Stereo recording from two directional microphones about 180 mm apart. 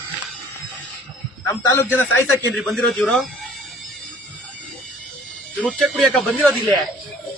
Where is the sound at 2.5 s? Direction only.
Centre (ahead or behind).